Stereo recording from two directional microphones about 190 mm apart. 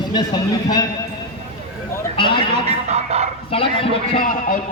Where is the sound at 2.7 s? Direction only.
35° right (ahead or behind).